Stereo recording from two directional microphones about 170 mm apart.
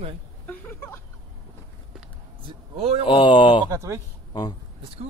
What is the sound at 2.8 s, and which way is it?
Speech, 35° right (ahead or behind).